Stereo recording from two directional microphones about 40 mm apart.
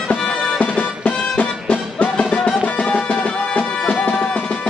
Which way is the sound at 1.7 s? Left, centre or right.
Left.